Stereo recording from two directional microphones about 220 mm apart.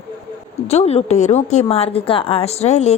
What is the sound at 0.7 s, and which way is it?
A woman's voice, 30° left (ahead or behind).